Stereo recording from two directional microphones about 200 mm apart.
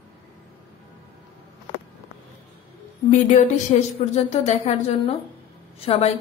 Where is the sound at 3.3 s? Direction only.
35° left (ahead or behind).